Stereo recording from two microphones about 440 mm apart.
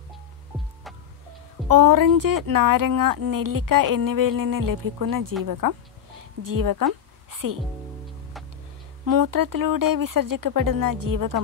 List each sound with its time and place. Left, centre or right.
1.7 s speech: right
5.4 s a sound: right
9.0 s speech: right